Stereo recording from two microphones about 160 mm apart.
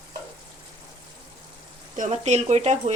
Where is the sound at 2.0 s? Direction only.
45° right (ahead or behind).